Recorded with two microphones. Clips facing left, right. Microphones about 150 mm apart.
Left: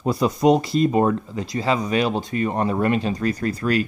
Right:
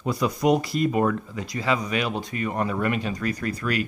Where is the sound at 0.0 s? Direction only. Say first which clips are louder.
Left 5 dB; 30° left (ahead or behind).